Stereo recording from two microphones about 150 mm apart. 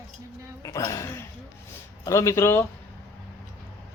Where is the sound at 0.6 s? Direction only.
20° left (ahead or behind).